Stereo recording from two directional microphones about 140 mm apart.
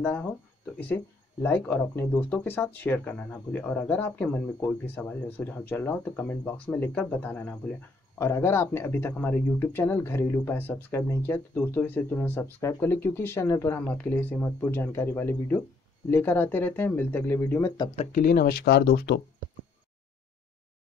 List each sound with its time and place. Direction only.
0.0 s speech: 10° left (ahead or behind)
18.1 s speech: 90° left